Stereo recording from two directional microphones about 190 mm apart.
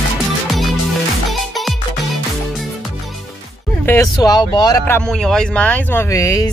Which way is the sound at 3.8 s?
15° left (ahead or behind).